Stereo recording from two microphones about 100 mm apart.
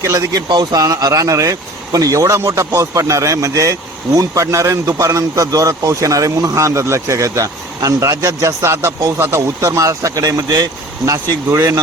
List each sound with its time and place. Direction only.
0.0 s speech: 30° right (ahead or behind)
0.4 s speech: 45° right (ahead or behind)